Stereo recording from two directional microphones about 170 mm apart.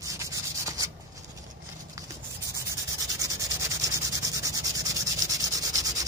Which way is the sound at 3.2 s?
20° right (ahead or behind).